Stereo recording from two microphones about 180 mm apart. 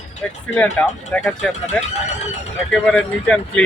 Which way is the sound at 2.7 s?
5° left (ahead or behind).